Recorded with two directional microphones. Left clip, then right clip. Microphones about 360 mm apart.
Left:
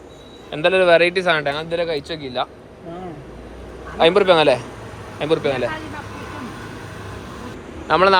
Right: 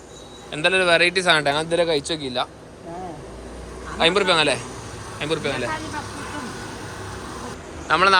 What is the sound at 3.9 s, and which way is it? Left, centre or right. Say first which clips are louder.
A man's voice: left 4 dB; centre.